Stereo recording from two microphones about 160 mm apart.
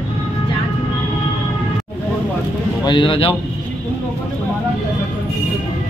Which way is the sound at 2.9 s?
30° left (ahead or behind).